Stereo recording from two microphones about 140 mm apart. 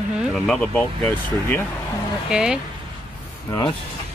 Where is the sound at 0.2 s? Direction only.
Centre (ahead or behind).